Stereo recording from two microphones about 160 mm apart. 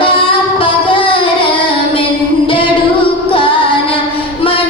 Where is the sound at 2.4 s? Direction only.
35° left (ahead or behind).